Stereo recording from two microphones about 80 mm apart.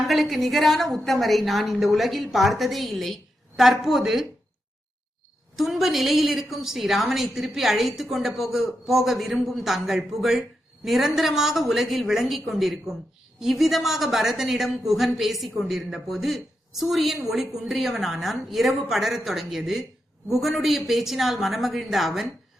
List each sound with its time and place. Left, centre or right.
0.1 s a woman's voice: centre
5.5 s a woman's voice: centre